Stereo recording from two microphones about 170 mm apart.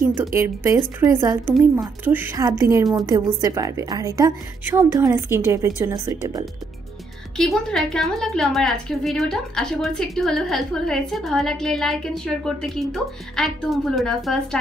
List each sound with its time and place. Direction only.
0.0 s a woman's voice: 10° right (ahead or behind)
7.3 s a woman's voice: centre (ahead or behind)